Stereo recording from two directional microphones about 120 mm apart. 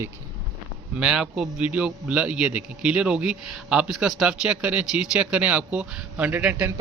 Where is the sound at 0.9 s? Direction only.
5° right (ahead or behind).